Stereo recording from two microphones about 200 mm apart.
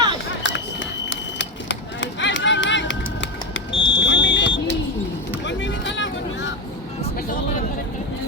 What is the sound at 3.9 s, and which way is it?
Smoke detector, 65° left (ahead or behind).